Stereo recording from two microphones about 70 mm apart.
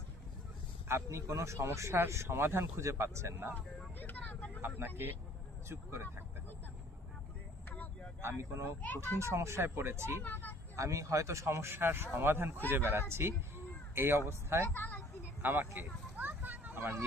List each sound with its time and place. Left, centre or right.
0.9 s speech: right
3.9 s vehicle: left
5.6 s speech: right
8.2 s speech: right
10.2 s speech: left
10.8 s speech: right
14.7 s a sound: left
15.4 s a sound: right